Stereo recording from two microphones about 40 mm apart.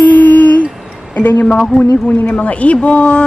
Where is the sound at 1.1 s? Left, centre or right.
Left.